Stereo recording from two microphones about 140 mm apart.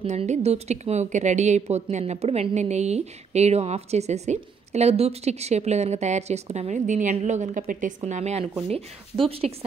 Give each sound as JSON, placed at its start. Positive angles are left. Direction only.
{"t": 0.0, "sound": "speech", "side_deg": -55}
{"t": 8.0, "sound": "speech", "side_deg": -55}